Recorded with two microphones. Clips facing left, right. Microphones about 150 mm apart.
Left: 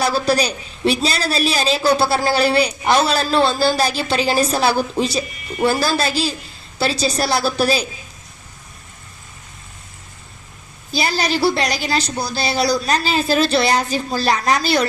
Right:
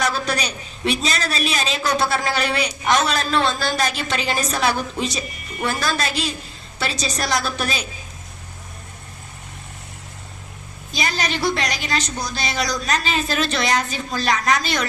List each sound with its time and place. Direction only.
0.0 s a woman's voice: 35° left (ahead or behind)
10.9 s a woman's voice: 35° left (ahead or behind)